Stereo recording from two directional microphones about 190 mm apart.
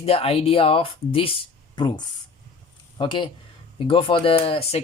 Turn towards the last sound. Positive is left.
turn(degrees=30)  # may be behind; listen again after turning